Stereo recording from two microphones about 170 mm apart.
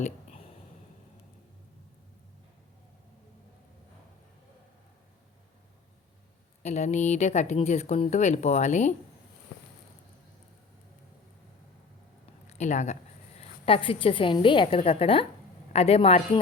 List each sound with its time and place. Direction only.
0.0 s a sound: 35° left (ahead or behind)
6.6 s speech: 40° left (ahead or behind)
12.5 s speech: 45° left (ahead or behind)
13.7 s speech: 30° left (ahead or behind)